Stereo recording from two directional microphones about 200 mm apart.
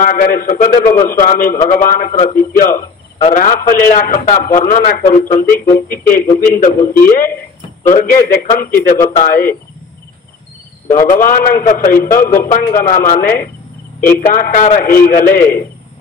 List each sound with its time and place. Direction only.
0.0 s a man's voice: 45° left (ahead or behind)
10.9 s a man's voice: 40° left (ahead or behind)